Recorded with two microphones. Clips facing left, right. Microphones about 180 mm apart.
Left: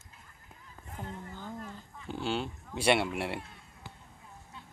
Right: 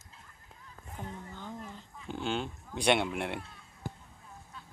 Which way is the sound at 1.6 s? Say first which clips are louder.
Left 1 dB; centre (ahead or behind).